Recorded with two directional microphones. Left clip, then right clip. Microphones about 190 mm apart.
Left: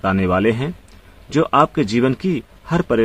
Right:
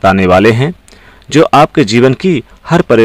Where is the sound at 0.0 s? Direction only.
45° right (ahead or behind).